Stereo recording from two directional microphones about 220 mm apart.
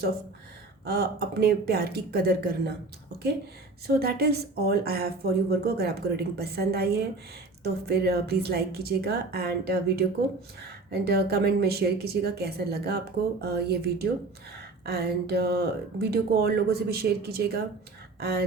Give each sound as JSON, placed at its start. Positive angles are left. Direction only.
{"t": 0.9, "sound": "speech", "side_deg": -45}